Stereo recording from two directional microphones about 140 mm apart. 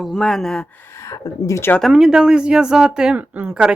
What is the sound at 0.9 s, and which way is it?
Speech, 20° left (ahead or behind).